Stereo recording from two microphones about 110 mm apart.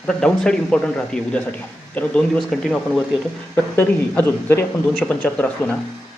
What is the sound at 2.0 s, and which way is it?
Speech, 15° left (ahead or behind).